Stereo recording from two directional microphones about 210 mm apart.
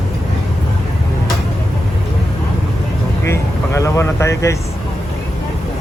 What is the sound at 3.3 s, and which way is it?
Vehicle, 15° left (ahead or behind).